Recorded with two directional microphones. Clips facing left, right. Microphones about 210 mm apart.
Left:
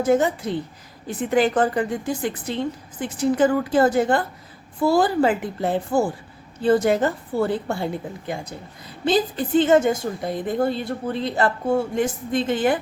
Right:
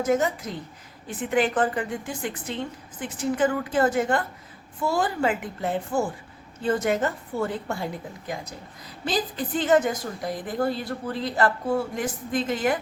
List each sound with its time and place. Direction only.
0.0 s a woman's voice: 30° left (ahead or behind)
9.0 s a woman's voice: 25° left (ahead or behind)